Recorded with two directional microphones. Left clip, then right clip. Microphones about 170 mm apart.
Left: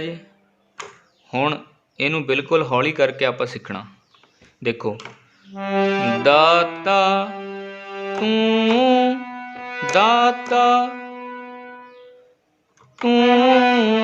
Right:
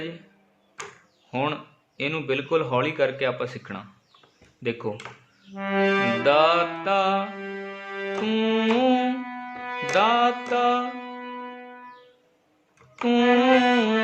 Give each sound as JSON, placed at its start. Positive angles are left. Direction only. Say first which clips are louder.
{"t": 1.3, "sound": "a man's voice", "louder": "left 6 dB", "side_deg": 35}
{"t": 6.2, "sound": "music", "louder": "left 6 dB", "side_deg": 35}
{"t": 13.0, "sound": "a man's voice", "louder": "left 5 dB", "side_deg": 30}